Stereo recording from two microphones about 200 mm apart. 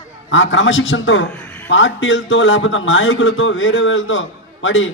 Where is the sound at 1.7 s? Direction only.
70° left (ahead or behind).